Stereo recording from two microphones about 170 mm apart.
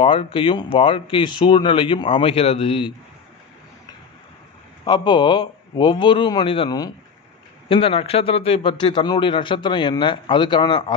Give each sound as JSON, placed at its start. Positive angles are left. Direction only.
{"t": 0.0, "sound": "speech", "side_deg": 30}
{"t": 4.8, "sound": "a man's voice", "side_deg": 25}